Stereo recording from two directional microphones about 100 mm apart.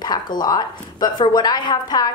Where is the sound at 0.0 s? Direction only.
45° left (ahead or behind).